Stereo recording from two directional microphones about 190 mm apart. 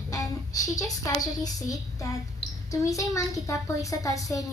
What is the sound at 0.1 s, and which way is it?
A woman's voice, 20° left (ahead or behind).